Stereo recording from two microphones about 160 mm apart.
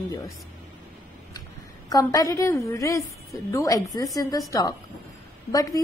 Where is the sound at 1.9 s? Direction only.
20° left (ahead or behind).